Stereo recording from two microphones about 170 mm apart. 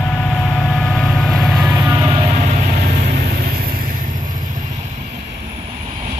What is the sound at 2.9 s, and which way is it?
Vehicle, 55° right (ahead or behind).